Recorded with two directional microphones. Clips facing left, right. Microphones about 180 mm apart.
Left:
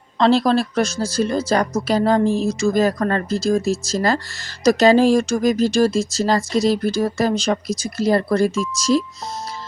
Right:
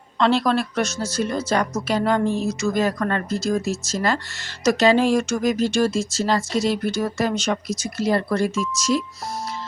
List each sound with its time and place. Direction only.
0.2 s speech: 35° left (ahead or behind)